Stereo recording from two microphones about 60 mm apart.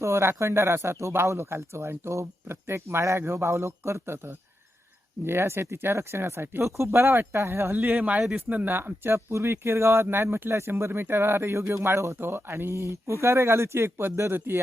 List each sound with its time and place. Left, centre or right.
0.0 s speech: right
6.7 s speech: right
7.8 s speech: centre
8.7 s speech: right